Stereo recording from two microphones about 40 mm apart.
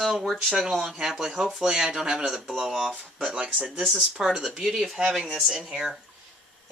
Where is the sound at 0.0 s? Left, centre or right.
Centre.